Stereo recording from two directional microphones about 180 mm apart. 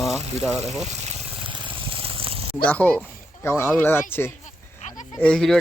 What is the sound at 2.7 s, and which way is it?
Speech, 5° left (ahead or behind).